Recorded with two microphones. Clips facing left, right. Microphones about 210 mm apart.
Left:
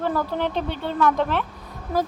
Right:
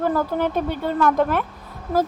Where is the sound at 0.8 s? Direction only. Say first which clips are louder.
Right 2 dB; 10° right (ahead or behind).